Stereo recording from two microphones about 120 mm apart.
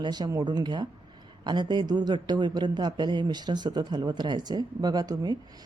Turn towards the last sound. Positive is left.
turn(degrees=-35)  # may be behind; listen again after turning